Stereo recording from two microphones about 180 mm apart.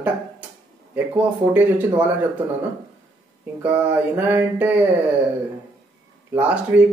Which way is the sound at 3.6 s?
10° right (ahead or behind).